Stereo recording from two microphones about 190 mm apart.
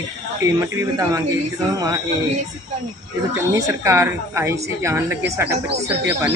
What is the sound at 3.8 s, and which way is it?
Speech, 15° right (ahead or behind).